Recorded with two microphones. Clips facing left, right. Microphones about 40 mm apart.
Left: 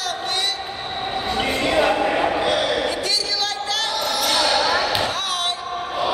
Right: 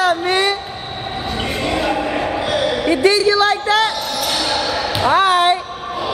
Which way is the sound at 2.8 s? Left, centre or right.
Right.